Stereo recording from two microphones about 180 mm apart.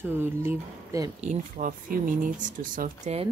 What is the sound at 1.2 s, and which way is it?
Speech, 45° right (ahead or behind).